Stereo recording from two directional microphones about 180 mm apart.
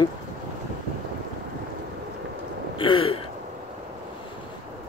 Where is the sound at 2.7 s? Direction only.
30° left (ahead or behind).